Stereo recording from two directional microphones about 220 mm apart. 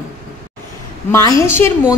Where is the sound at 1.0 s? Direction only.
15° left (ahead or behind).